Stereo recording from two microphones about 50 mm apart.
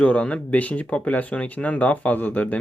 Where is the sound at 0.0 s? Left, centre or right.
Left.